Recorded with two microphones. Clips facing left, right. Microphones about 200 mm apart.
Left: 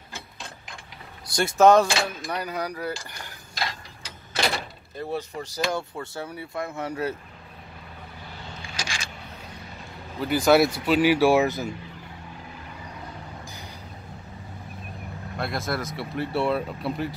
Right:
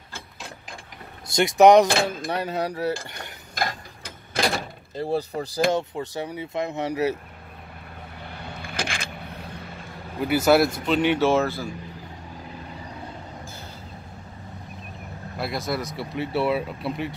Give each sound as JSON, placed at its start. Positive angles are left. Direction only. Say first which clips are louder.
{"t": 1.3, "sound": "speech", "louder": "right 3 dB", "side_deg": -15}
{"t": 2.3, "sound": "speech", "louder": "right 2 dB", "side_deg": -25}
{"t": 3.5, "sound": "mechanisms", "louder": "right 4 dB", "side_deg": -50}
{"t": 4.9, "sound": "speech", "louder": "right 5 dB", "side_deg": -30}
{"t": 5.7, "sound": "speech", "louder": "right 5 dB", "side_deg": -20}
{"t": 8.5, "sound": "vehicle", "louder": "right 5 dB", "side_deg": -55}
{"t": 10.2, "sound": "speech", "louder": "even", "side_deg": -5}
{"t": 15.3, "sound": "speech", "louder": "right 1 dB", "side_deg": 0}